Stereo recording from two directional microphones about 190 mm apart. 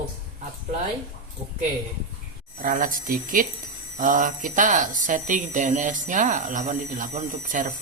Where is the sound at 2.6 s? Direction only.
45° right (ahead or behind).